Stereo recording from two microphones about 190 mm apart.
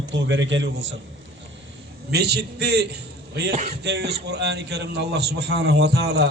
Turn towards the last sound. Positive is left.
turn(degrees=-60)  # may be behind; listen again after turning